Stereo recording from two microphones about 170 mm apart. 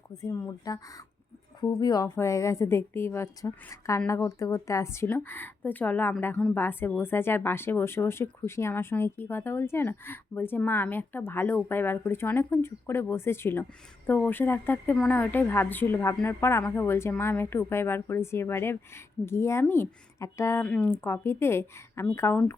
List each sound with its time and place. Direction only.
0.1 s a woman's voice: 20° left (ahead or behind)